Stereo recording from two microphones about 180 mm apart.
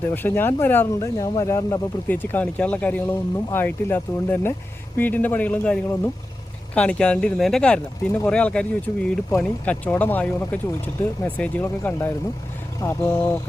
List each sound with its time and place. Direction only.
0.1 s speech: 10° left (ahead or behind)